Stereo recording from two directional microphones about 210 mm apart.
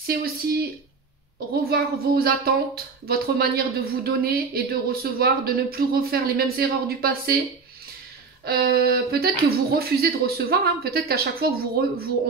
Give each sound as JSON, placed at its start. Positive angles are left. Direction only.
{"t": 0.0, "sound": "a woman's voice", "side_deg": -45}
{"t": 8.5, "sound": "a woman's voice", "side_deg": -45}